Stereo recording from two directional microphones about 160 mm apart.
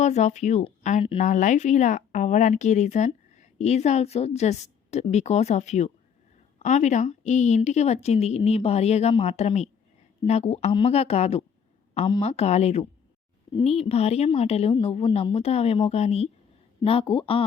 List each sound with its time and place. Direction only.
0.0 s a woman's voice: 45° left (ahead or behind); by 17.4 s 30° left (ahead or behind)